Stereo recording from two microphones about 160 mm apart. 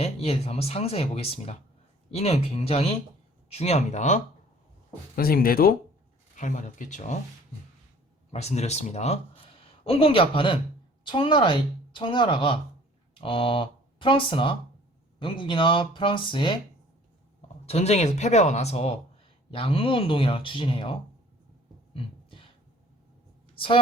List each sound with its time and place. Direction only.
0.0 s speech: 40° left (ahead or behind)
5.1 s speech: 70° left (ahead or behind)
6.3 s speech: 50° left (ahead or behind)
8.3 s speech: 40° left (ahead or behind)
17.7 s speech: 40° left (ahead or behind)
21.9 s beatboxing: 35° left (ahead or behind)
23.6 s a woman's voice: 35° left (ahead or behind)